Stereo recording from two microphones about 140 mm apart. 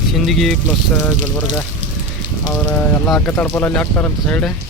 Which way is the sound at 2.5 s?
15° left (ahead or behind).